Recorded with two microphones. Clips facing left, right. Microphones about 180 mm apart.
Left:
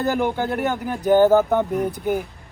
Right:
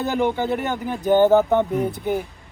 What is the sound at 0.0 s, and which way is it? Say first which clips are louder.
Speech: even; 5° left (ahead or behind).